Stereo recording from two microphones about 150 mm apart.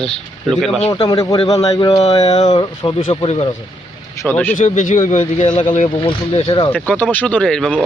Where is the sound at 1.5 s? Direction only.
25° left (ahead or behind).